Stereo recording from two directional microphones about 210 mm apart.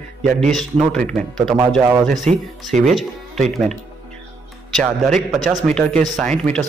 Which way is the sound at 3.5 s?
Centre (ahead or behind).